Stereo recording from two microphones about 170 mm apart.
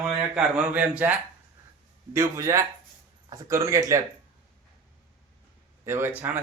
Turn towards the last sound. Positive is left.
turn(degrees=-10)  # may be behind; listen again after turning